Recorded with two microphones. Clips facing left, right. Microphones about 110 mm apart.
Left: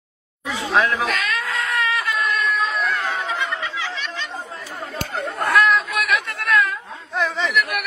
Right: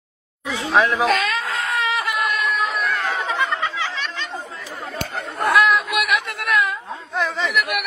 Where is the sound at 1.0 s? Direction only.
25° right (ahead or behind).